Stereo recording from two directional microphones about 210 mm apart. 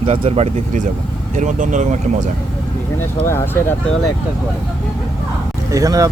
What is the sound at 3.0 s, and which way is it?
Speech, 10° left (ahead or behind).